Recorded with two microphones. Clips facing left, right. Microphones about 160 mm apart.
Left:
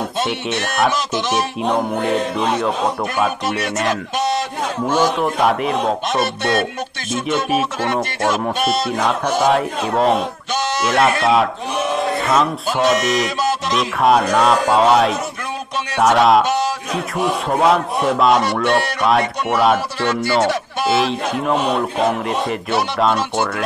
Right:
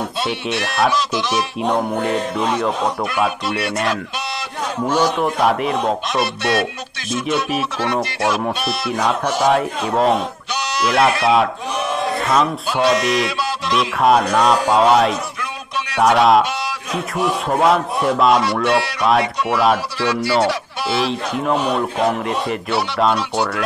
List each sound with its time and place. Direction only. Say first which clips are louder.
1.6 s speech: right 2 dB; centre (ahead or behind)
7.2 s speech: left 2 dB; centre (ahead or behind)
8.5 s music: left 4 dB; 50° left (ahead or behind)
8.9 s speech: left 1 dB; centre (ahead or behind)
13.4 s music: left 3 dB; 45° left (ahead or behind)
13.7 s speech: right 1 dB; centre (ahead or behind)
16.4 s a sound: left 6 dB; 45° left (ahead or behind)
17.5 s speech: even; centre (ahead or behind)
20.9 s speech: left 2 dB; centre (ahead or behind)